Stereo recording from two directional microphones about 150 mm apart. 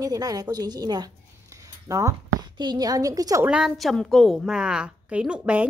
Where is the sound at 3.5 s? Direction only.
5° right (ahead or behind).